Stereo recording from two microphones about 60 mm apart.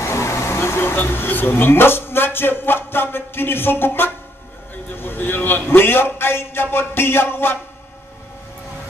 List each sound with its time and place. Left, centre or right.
0.0 s a man's voice: left